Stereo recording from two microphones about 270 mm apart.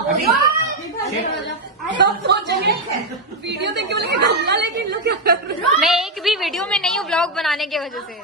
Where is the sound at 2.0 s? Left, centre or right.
Right.